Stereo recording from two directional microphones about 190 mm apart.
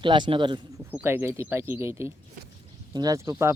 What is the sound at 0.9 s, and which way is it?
Speech, 10° right (ahead or behind).